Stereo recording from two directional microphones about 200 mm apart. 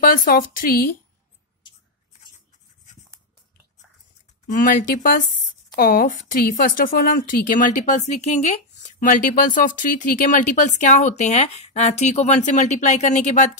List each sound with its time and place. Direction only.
0.0 s a woman's voice: 45° left (ahead or behind)
4.5 s speech: 40° left (ahead or behind)